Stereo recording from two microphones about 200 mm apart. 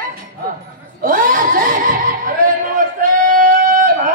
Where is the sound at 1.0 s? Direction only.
40° right (ahead or behind).